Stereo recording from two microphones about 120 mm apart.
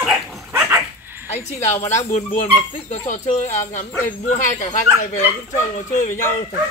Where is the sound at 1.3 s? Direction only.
70° left (ahead or behind).